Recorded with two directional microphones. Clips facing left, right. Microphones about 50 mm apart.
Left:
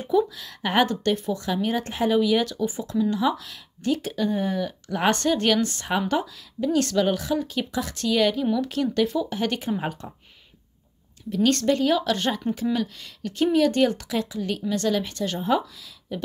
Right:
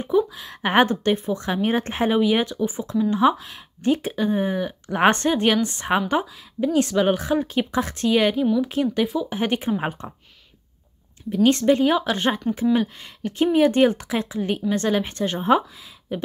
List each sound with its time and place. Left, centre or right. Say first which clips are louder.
0.0 s speech: right 1 dB; right; by 9.3 s centre
9.3 s speech: right 3 dB; right
11.2 s speech: right 4 dB; right